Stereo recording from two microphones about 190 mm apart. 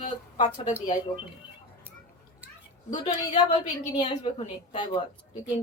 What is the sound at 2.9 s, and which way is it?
Speech, 25° left (ahead or behind).